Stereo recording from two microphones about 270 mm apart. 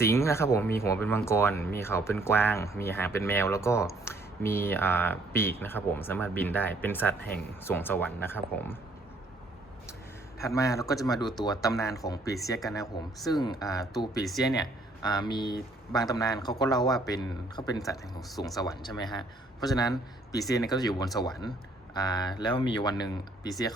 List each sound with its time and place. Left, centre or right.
0.0 s speech: centre
10.4 s speech: centre
14.2 s speech: centre
14.5 s speech: centre
19.7 s a man's voice: centre